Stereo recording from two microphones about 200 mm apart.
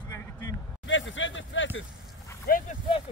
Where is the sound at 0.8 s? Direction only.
70° left (ahead or behind).